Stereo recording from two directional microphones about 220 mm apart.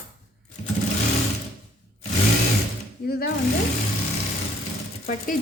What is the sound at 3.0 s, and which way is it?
Speech, 45° left (ahead or behind).